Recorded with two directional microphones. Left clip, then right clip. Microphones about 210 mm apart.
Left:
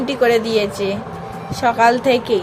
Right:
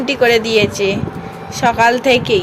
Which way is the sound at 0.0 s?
5° right (ahead or behind).